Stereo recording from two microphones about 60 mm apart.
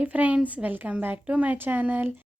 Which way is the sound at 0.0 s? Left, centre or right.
Right.